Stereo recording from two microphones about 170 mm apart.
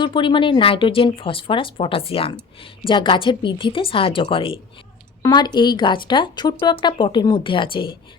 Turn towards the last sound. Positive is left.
turn(degrees=30)  # may be behind; listen again after turning